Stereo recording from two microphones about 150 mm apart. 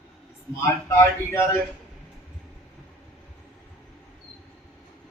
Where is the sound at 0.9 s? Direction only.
15° left (ahead or behind).